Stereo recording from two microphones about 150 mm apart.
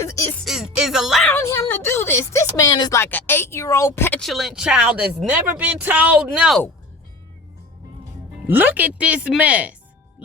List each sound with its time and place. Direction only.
0.0 s music: 20° left (ahead or behind)
0.4 s music: 5° right (ahead or behind)
1.2 s a sound: 15° left (ahead or behind)
3.0 s speech: 15° left (ahead or behind)
4.2 s speech: centre (ahead or behind)
8.4 s speech: 10° right (ahead or behind)